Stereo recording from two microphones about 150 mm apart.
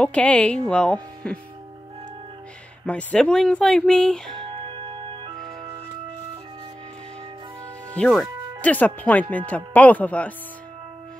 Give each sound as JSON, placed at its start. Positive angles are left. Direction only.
{"t": 0.0, "sound": "speech", "side_deg": 10}
{"t": 2.9, "sound": "speech", "side_deg": 10}
{"t": 4.4, "sound": "music", "side_deg": -35}
{"t": 7.9, "sound": "speech", "side_deg": 5}